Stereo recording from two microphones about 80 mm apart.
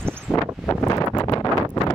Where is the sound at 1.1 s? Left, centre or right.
Left.